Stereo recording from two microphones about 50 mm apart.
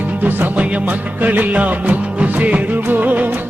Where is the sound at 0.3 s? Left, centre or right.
Right.